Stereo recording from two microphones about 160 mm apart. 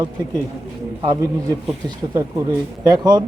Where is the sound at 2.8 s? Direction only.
25° right (ahead or behind).